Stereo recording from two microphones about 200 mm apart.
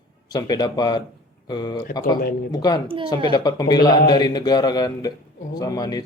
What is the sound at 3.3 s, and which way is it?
A man's voice, 20° left (ahead or behind).